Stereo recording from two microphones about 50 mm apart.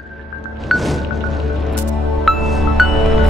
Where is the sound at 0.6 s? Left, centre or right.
Centre.